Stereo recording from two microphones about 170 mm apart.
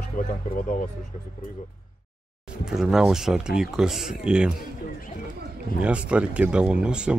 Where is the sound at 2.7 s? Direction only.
5° right (ahead or behind).